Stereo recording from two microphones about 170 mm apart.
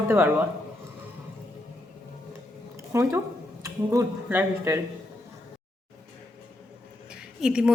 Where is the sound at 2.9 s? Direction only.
15° right (ahead or behind).